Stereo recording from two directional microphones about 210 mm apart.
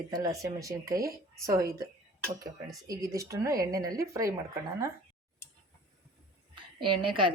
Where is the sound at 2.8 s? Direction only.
15° right (ahead or behind).